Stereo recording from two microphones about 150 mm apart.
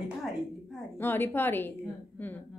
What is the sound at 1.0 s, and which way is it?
Speech, 15° left (ahead or behind).